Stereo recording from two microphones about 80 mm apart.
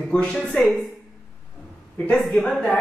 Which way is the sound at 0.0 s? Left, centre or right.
Centre.